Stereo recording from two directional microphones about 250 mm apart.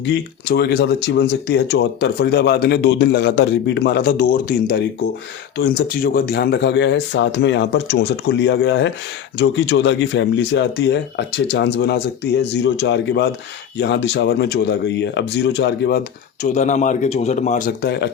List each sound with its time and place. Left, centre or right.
0.0 s speech: left
17.8 s speech: left